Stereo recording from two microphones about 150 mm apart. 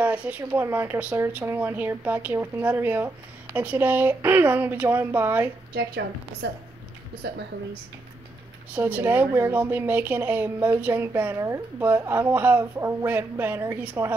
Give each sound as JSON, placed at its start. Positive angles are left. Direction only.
{"t": 0.0, "sound": "a woman's voice", "side_deg": -10}
{"t": 5.7, "sound": "a woman's voice", "side_deg": -90}
{"t": 7.2, "sound": "a woman's voice", "side_deg": -90}
{"t": 8.7, "sound": "a woman's voice", "side_deg": -10}